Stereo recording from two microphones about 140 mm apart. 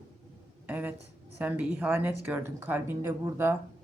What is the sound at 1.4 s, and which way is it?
Speech, 10° right (ahead or behind).